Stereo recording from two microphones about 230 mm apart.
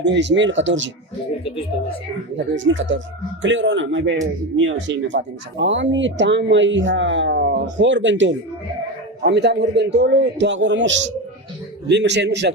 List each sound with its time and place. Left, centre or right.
0.0 s speech: right
2.4 s speech: right